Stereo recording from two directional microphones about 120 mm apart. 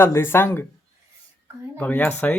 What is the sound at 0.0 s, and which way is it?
Speech, 20° left (ahead or behind).